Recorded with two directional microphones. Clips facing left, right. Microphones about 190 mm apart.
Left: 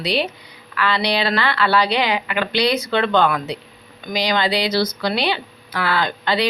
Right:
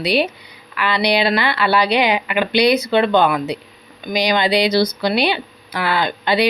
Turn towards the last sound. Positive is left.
turn(degrees=-15)  # may be behind; listen again after turning